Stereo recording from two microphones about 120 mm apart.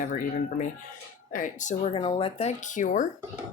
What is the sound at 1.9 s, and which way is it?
Speech, 50° left (ahead or behind).